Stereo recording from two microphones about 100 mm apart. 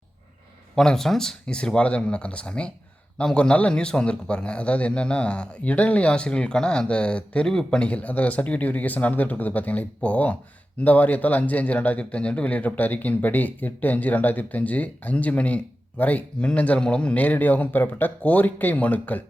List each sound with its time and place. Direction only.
0.8 s a man's voice: 5° left (ahead or behind)